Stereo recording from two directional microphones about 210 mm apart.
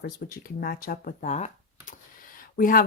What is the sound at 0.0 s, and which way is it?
Speech, 45° left (ahead or behind).